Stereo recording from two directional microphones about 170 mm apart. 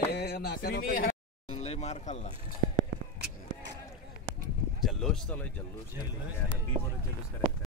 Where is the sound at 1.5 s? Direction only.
40° left (ahead or behind).